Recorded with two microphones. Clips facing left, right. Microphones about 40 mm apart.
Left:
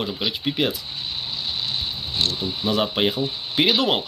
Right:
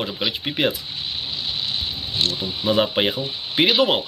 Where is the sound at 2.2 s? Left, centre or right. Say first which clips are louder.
Even; centre.